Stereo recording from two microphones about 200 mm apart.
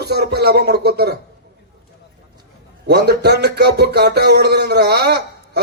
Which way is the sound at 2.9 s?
55° right (ahead or behind).